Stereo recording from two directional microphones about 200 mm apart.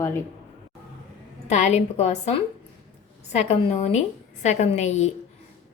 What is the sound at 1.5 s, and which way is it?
Speech, 35° left (ahead or behind).